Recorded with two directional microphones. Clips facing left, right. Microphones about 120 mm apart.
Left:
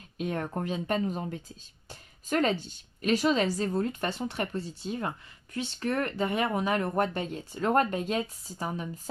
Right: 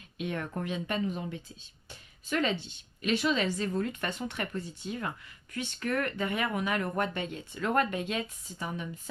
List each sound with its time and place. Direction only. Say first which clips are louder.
0.2 s speech: left 3 dB; 35° left (ahead or behind)